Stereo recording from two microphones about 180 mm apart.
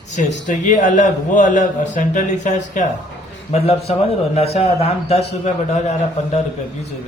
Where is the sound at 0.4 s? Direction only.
45° left (ahead or behind).